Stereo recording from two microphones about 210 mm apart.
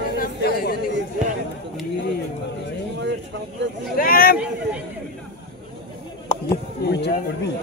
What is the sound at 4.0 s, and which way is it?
Speech, 45° left (ahead or behind).